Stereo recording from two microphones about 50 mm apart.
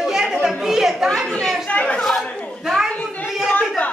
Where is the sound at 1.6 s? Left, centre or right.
Left.